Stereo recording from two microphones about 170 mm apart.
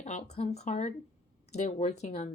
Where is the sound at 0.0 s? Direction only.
40° left (ahead or behind).